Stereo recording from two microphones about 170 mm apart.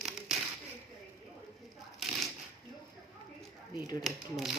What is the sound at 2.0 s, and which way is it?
Shuffling cards, centre (ahead or behind).